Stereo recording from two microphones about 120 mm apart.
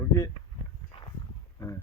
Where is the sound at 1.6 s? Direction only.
25° left (ahead or behind).